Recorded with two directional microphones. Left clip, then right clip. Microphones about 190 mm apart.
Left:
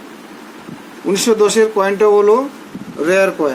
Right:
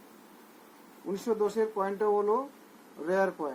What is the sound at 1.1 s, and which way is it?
Speech, centre (ahead or behind).